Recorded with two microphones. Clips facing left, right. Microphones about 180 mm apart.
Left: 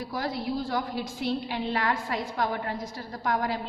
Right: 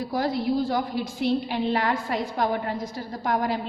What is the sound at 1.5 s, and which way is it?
A woman's voice, 30° right (ahead or behind).